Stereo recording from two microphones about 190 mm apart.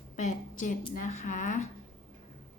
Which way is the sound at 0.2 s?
40° left (ahead or behind).